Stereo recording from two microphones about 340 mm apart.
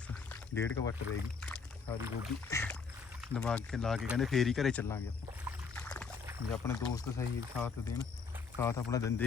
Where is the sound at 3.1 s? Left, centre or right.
Centre.